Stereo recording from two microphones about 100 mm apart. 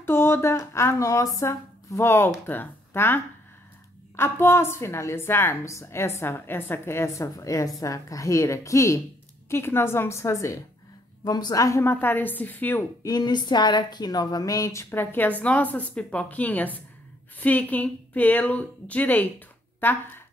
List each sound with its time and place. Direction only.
0.0 s speech: 25° left (ahead or behind)
4.2 s a woman's voice: 25° left (ahead or behind)
13.0 s a woman's voice: 40° left (ahead or behind); by 20.2 s 20° left (ahead or behind)